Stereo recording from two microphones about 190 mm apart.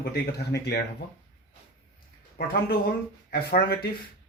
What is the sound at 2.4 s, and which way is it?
Speech, 55° left (ahead or behind).